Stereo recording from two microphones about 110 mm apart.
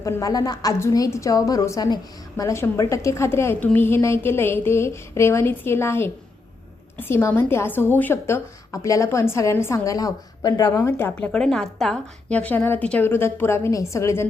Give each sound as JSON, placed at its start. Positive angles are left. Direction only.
{"t": 0.0, "sound": "a woman's voice", "side_deg": 30}
{"t": 10.7, "sound": "speech", "side_deg": 25}
{"t": 11.1, "sound": "a woman's voice", "side_deg": 5}